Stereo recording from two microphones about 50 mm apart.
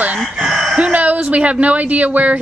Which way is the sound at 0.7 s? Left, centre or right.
Right.